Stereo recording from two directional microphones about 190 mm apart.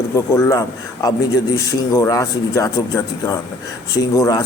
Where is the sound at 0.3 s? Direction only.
15° left (ahead or behind).